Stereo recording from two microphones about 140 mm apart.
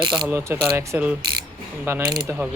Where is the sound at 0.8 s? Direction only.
15° right (ahead or behind).